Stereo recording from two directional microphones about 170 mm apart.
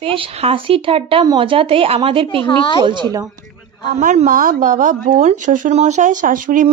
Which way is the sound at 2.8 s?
30° right (ahead or behind).